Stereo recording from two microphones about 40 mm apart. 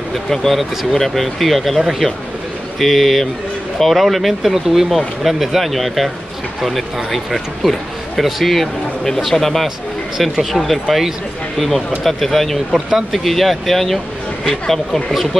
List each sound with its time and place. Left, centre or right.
0.1 s speech: centre